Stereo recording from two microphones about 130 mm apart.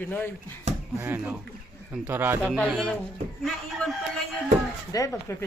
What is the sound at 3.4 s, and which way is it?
Speech, centre (ahead or behind).